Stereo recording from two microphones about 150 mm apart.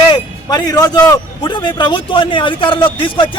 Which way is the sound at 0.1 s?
25° left (ahead or behind).